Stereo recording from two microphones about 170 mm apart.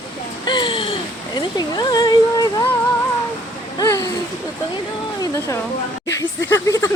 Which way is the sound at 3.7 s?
20° left (ahead or behind).